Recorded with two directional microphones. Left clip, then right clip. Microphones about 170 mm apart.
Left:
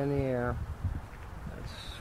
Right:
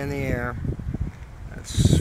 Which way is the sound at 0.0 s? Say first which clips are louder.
Right 3 dB; 5° right (ahead or behind).